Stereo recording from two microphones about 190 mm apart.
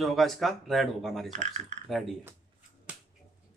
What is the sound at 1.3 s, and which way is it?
Speech, 35° right (ahead or behind).